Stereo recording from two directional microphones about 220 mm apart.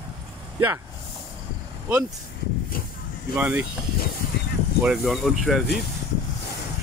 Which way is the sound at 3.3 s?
5° right (ahead or behind).